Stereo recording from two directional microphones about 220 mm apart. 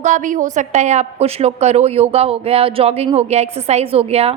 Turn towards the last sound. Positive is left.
turn(degrees=-25)  # may be behind; listen again after turning